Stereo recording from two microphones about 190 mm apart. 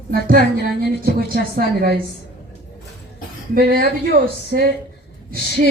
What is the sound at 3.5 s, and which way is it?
A woman's voice, 50° right (ahead or behind).